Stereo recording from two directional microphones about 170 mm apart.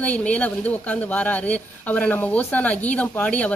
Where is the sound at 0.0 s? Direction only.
10° left (ahead or behind).